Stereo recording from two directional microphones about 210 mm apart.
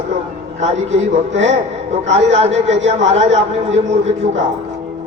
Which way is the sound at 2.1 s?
30° right (ahead or behind).